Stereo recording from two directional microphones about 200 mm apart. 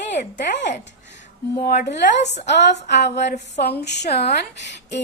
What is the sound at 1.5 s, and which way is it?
Speech, 45° left (ahead or behind).